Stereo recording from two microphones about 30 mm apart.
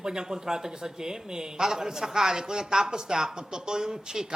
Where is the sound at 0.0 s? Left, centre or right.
Right.